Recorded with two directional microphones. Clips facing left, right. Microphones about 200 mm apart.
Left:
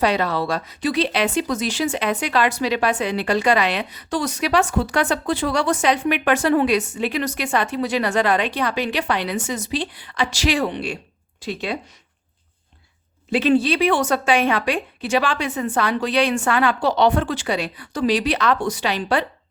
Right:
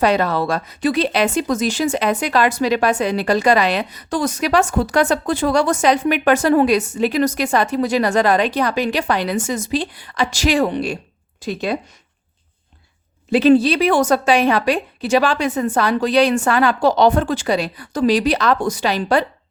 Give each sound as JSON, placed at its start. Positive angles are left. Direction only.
{"t": 0.0, "sound": "speech", "side_deg": -45}
{"t": 13.3, "sound": "a woman's voice", "side_deg": -40}